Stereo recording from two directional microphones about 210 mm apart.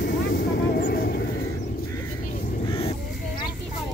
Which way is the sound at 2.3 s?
40° left (ahead or behind).